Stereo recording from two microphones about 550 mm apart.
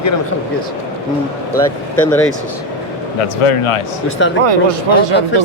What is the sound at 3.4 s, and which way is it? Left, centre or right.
Speech, left.